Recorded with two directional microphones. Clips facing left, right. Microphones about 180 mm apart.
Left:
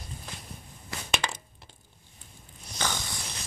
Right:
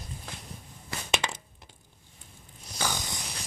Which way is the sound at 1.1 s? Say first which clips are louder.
Right 1 dB; 25° right (ahead or behind).